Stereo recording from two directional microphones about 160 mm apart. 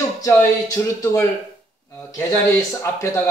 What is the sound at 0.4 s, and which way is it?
Speech, 15° left (ahead or behind).